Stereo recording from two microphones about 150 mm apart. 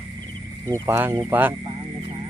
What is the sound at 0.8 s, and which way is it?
Speech, 15° right (ahead or behind).